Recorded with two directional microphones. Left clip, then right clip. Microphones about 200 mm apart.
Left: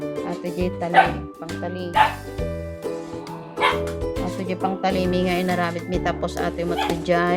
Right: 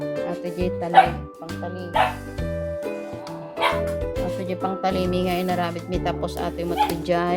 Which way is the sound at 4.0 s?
5° right (ahead or behind).